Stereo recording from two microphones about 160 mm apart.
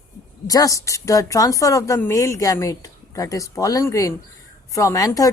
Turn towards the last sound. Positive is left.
turn(degrees=20)  # may be behind; listen again after turning